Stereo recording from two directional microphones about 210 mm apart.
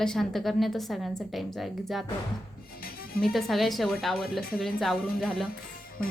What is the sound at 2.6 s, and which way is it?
Music, 45° left (ahead or behind).